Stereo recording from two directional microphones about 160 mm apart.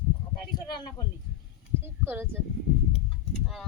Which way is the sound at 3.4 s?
Centre (ahead or behind).